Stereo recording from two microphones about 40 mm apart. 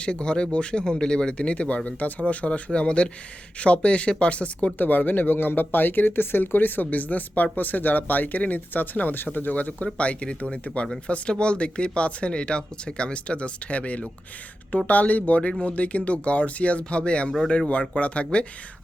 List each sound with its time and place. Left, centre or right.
0.0 s speech: left
4.8 s speech: left